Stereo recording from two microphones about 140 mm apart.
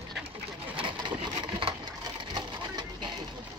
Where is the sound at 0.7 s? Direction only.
35° right (ahead or behind).